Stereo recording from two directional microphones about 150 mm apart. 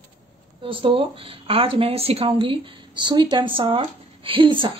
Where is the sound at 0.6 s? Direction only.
35° right (ahead or behind).